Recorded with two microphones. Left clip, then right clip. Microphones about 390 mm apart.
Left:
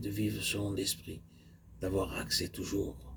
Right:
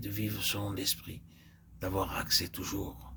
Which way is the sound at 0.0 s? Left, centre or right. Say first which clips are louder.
Left 1 dB; right.